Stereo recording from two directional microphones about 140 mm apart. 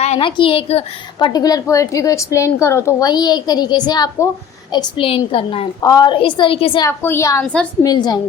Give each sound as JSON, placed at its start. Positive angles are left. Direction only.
{"t": 0.0, "sound": "a sound", "side_deg": 50}
{"t": 0.3, "sound": "a woman's voice", "side_deg": 40}
{"t": 1.3, "sound": "a woman's voice", "side_deg": 25}
{"t": 5.8, "sound": "a woman's voice", "side_deg": 25}
{"t": 6.8, "sound": "a woman's voice", "side_deg": 20}
{"t": 7.4, "sound": "a woman's voice", "side_deg": 5}
{"t": 7.8, "sound": "a woman's voice", "side_deg": 30}